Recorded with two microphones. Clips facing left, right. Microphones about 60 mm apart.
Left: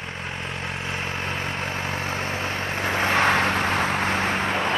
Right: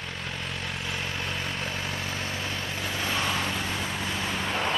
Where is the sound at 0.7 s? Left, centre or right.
Left.